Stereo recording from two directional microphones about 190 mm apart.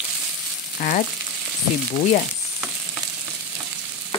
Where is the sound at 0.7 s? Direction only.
45° left (ahead or behind).